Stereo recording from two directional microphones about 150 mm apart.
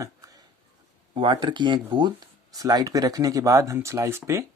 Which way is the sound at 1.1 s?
35° right (ahead or behind).